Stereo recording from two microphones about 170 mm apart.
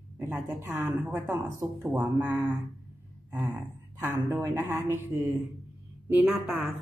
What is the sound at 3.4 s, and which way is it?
A woman's voice, 10° right (ahead or behind).